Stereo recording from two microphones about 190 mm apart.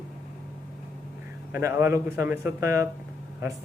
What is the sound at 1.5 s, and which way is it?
Speech, 15° right (ahead or behind).